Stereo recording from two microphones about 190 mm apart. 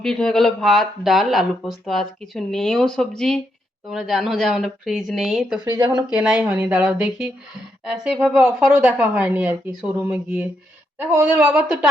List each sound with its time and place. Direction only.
0.0 s speech: 5° left (ahead or behind)
5.7 s speech: 20° right (ahead or behind)
6.1 s a woman's voice: 5° right (ahead or behind)